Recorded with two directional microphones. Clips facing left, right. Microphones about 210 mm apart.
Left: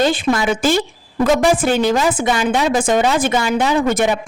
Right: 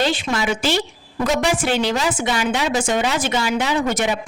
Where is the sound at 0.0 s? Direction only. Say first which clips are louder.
Left 5 dB; 50° left (ahead or behind).